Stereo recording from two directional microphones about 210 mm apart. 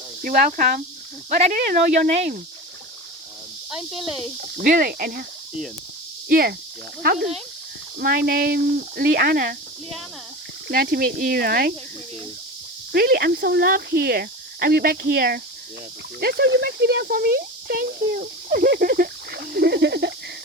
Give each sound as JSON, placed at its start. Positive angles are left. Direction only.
{"t": 0.2, "sound": "speech", "side_deg": -40}
{"t": 3.7, "sound": "speech", "side_deg": 0}
{"t": 4.5, "sound": "speech", "side_deg": -45}
{"t": 10.7, "sound": "speech", "side_deg": -45}
{"t": 12.9, "sound": "speech", "side_deg": -50}